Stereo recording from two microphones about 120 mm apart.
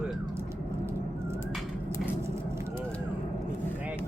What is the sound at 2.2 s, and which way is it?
Vehicle, 20° right (ahead or behind).